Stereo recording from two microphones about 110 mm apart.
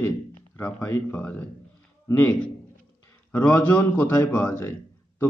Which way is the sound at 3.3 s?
20° left (ahead or behind).